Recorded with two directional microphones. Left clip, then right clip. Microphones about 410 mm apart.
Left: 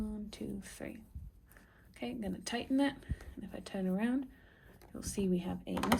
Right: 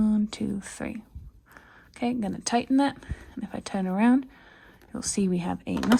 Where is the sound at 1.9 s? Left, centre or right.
Centre.